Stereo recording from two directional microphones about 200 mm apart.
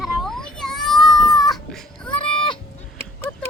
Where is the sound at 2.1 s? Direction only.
25° left (ahead or behind).